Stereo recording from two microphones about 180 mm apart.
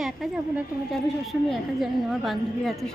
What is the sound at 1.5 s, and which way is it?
A woman's voice, centre (ahead or behind).